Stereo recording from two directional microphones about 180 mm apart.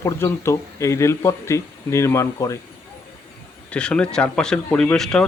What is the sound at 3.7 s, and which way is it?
Speech, 5° left (ahead or behind).